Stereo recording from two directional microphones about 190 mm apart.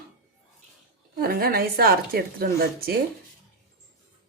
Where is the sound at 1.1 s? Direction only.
50° right (ahead or behind).